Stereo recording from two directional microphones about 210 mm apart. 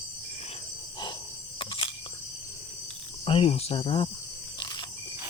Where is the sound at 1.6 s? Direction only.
25° left (ahead or behind).